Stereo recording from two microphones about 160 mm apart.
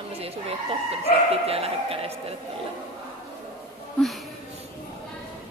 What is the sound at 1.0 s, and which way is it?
Speech, 40° right (ahead or behind).